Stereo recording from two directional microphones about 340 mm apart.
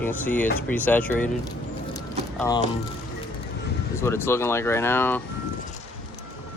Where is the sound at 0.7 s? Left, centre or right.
Centre.